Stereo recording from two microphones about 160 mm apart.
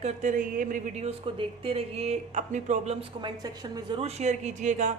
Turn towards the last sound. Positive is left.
turn(degrees=-50)  # may be behind; listen again after turning